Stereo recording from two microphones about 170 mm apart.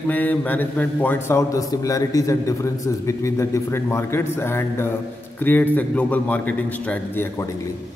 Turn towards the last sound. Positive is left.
turn(degrees=15)  # may be behind; listen again after turning